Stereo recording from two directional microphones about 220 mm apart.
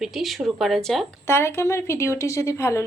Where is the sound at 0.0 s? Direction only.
Centre (ahead or behind).